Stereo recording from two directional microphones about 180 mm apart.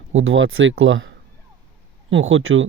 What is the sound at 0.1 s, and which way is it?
Speech, 90° right.